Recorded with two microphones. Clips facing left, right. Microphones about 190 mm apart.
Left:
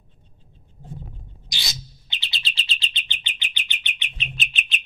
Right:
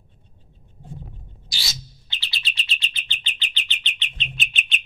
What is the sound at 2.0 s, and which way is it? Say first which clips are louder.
Bird: even; 20° left (ahead or behind).